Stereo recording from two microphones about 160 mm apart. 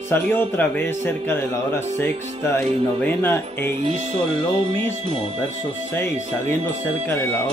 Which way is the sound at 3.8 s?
40° right (ahead or behind).